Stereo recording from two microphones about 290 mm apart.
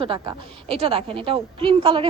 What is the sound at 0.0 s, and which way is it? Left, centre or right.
A woman's voice, centre.